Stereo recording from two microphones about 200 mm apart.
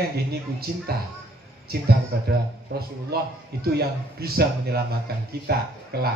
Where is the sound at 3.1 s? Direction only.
50° right (ahead or behind).